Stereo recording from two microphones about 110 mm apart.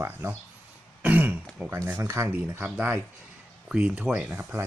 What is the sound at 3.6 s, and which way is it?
Speech, 10° right (ahead or behind).